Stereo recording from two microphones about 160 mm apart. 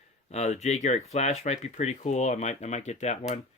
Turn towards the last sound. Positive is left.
turn(degrees=45)  # may be behind; listen again after turning